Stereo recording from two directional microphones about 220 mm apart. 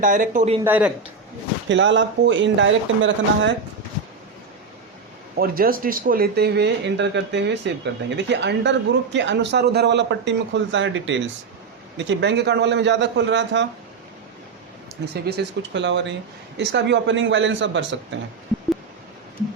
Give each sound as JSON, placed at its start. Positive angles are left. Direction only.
{"t": 0.0, "sound": "speech", "side_deg": -40}
{"t": 0.6, "sound": "speech", "side_deg": -5}
{"t": 1.7, "sound": "speech", "side_deg": -55}
{"t": 5.4, "sound": "speech", "side_deg": -40}
{"t": 15.1, "sound": "speech", "side_deg": -50}